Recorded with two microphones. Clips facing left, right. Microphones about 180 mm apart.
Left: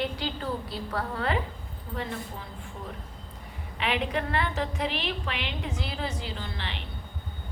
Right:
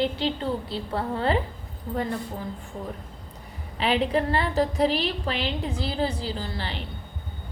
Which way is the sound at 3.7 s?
35° right (ahead or behind).